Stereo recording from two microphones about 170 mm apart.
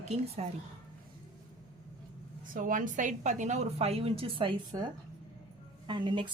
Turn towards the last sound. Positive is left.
turn(degrees=-30)  # may be behind; listen again after turning